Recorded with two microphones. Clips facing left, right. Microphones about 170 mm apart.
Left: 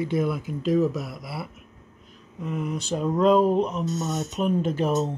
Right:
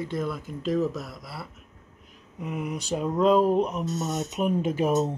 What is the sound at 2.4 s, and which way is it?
Speech, 10° right (ahead or behind).